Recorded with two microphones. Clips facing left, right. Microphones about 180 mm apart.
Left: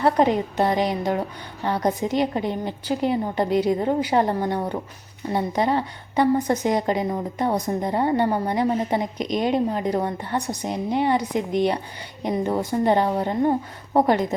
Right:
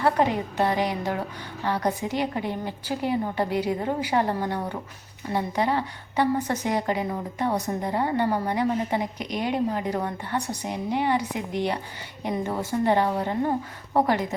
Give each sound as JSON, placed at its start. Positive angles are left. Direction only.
{"t": 0.0, "sound": "a woman's voice", "side_deg": 20}